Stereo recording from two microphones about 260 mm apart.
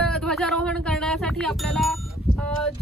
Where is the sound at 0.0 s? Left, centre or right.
Centre.